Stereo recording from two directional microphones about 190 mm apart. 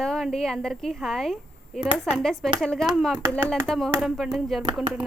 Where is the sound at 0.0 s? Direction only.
Centre (ahead or behind).